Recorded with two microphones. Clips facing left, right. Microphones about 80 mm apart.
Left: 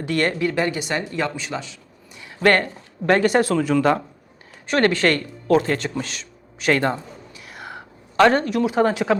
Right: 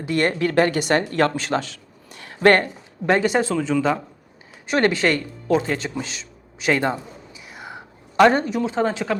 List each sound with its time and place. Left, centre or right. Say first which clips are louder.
0.1 s a woman's voice: right 1 dB; right
0.3 s speech: right 3 dB; right
2.4 s a woman's voice: right 2 dB; right
3.5 s speech: left 2 dB; centre
6.7 s a man's voice: left 1 dB; centre
7.4 s whispering: left 1 dB; centre
8.1 s speech: even; centre
8.6 s speech: left 3 dB; centre